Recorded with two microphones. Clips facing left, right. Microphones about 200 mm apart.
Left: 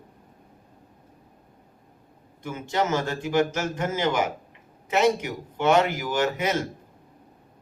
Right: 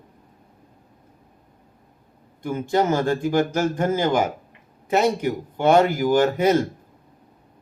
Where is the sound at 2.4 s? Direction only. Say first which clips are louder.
Right 5 dB; 35° right (ahead or behind).